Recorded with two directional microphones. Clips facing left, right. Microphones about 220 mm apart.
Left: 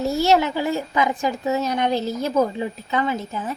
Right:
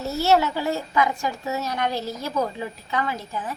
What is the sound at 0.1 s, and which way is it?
A woman's voice, 15° left (ahead or behind).